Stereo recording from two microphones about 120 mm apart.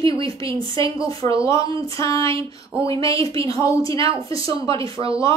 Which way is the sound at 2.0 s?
25° left (ahead or behind).